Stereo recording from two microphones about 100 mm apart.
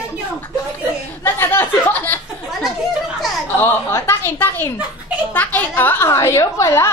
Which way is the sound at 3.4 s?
20° left (ahead or behind).